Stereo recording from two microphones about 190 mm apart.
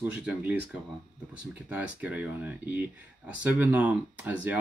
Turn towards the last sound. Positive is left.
turn(degrees=-10)  # may be behind; listen again after turning